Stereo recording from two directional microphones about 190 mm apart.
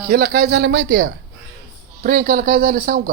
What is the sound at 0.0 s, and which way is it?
A woman's voice, 50° right (ahead or behind).